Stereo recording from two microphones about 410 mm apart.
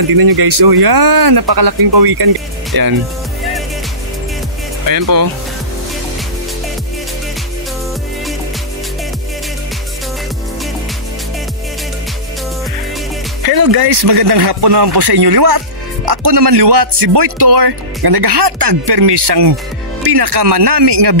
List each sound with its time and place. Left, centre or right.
0.1 s speech: right
13.4 s speech: right